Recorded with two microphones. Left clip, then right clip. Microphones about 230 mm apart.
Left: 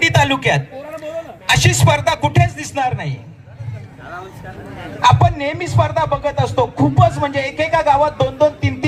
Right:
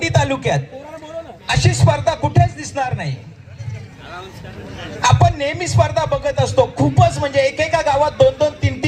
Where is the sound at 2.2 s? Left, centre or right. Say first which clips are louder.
Left 1 dB; right.